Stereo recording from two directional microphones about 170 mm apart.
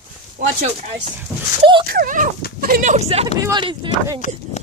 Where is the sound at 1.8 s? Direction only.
55° right (ahead or behind); by 3.2 s 40° right (ahead or behind).